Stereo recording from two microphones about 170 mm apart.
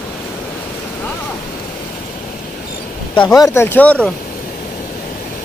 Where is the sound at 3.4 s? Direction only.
15° left (ahead or behind).